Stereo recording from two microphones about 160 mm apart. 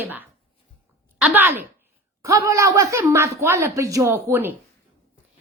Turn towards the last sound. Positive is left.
turn(degrees=-15)  # may be behind; listen again after turning